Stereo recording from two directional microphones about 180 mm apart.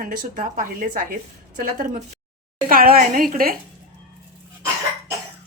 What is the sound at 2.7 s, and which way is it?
Speech, 55° right (ahead or behind).